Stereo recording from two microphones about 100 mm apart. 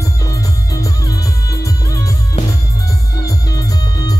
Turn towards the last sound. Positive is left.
turn(degrees=40)  # may be behind; listen again after turning